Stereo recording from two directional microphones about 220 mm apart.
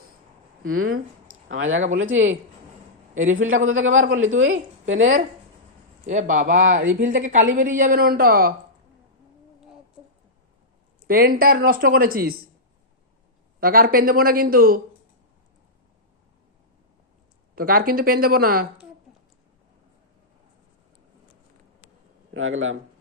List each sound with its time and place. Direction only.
0.6 s speech: 75° right (ahead or behind)
1.3 s a sound: 65° right (ahead or behind)
1.9 s a woman's voice: 60° right (ahead or behind)
3.7 s a woman's voice: 65° right (ahead or behind)
6.1 s speech: 35° right (ahead or behind)
11.0 s speech: 40° right (ahead or behind)
13.6 s speech: 40° right (ahead or behind)
17.5 s speech: 40° right (ahead or behind)
22.3 s speech: 65° right (ahead or behind)